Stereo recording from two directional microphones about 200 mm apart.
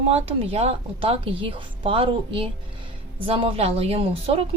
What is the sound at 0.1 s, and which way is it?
A woman's voice, 30° right (ahead or behind).